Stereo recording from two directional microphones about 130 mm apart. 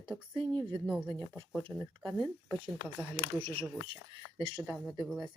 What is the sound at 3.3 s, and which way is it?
Speech, 40° right (ahead or behind).